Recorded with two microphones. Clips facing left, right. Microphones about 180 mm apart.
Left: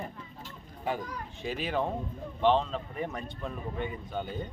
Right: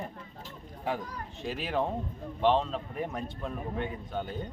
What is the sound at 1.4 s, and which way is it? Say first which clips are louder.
A man's voice: even; centre (ahead or behind).